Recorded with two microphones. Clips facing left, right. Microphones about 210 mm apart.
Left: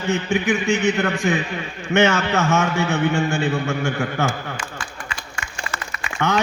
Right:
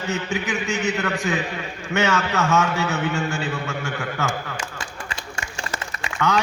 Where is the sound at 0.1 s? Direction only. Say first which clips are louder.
Left 6 dB; 25° left (ahead or behind).